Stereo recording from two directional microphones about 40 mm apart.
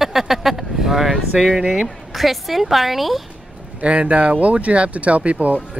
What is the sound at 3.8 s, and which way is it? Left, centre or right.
Speech, right.